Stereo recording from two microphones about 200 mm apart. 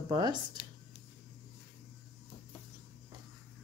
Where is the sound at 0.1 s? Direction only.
20° right (ahead or behind).